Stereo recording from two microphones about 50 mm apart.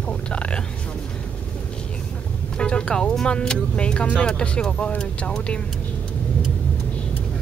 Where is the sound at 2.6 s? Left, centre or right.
Left.